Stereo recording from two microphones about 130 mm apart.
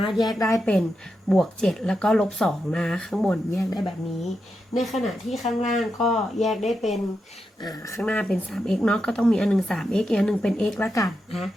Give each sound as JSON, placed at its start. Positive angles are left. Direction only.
{"t": 0.2, "sound": "speech", "side_deg": 30}
{"t": 0.6, "sound": "a woman's voice", "side_deg": 5}
{"t": 4.8, "sound": "speech", "side_deg": 0}
{"t": 7.6, "sound": "speech", "side_deg": 25}
{"t": 8.0, "sound": "speech", "side_deg": 10}